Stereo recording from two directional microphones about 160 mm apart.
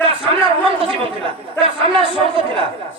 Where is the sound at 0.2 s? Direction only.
35° right (ahead or behind).